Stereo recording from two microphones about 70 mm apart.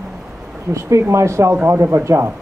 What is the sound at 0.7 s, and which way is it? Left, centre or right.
A woman's voice, right.